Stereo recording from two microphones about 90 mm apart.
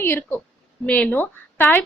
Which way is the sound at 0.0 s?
25° left (ahead or behind).